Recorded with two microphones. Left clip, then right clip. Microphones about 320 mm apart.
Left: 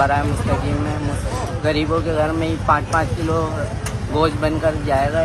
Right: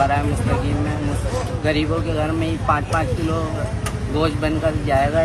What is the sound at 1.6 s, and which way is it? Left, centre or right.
Speech, centre.